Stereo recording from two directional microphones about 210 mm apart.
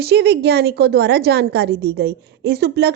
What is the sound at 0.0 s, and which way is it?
A woman's voice, 50° right (ahead or behind).